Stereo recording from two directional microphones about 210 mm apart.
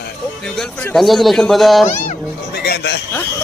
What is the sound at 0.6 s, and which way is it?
Speech, centre (ahead or behind).